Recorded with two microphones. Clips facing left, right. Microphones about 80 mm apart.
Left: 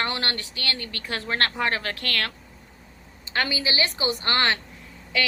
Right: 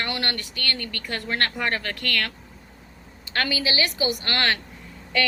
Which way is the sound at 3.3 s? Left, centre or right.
Left.